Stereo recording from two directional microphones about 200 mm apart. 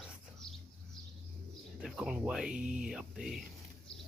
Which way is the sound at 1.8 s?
Centre (ahead or behind).